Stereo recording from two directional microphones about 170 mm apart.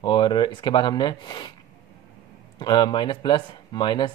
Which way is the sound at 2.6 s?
25° left (ahead or behind).